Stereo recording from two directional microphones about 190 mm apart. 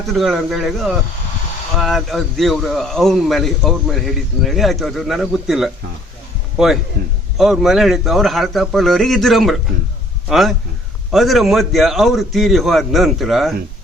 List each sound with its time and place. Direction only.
0.1 s a man's voice: centre (ahead or behind)
7.0 s a man's voice: 50° right (ahead or behind)
7.3 s a man's voice: centre (ahead or behind)